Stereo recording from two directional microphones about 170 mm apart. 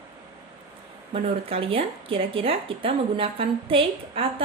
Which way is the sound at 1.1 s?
35° right (ahead or behind).